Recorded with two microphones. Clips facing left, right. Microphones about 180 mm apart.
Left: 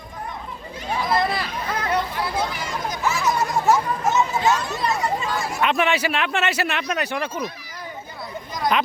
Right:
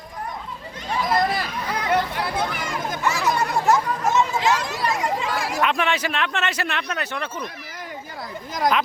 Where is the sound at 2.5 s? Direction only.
55° right (ahead or behind).